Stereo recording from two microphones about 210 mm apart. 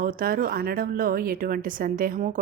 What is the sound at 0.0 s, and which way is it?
A woman's voice, 45° right (ahead or behind).